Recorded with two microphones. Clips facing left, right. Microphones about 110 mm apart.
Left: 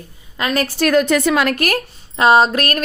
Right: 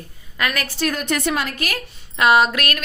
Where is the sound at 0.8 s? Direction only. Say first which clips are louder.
Left 9 dB; 80° left.